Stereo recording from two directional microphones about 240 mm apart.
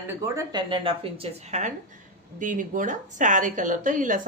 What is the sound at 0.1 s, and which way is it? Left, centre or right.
A woman's voice, centre.